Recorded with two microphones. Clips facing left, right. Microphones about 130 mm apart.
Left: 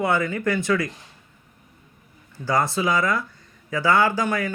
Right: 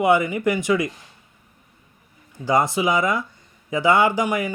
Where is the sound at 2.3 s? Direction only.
20° right (ahead or behind).